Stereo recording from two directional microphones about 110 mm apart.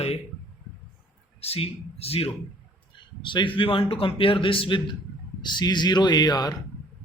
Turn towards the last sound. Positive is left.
turn(degrees=40)  # may be behind; listen again after turning